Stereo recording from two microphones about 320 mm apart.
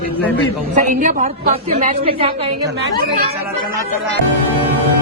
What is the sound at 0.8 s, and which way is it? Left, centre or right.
A woman's voice, right.